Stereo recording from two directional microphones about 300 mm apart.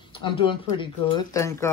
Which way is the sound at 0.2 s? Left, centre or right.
Centre.